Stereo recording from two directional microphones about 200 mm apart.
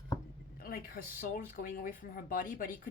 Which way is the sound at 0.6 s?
45° left (ahead or behind).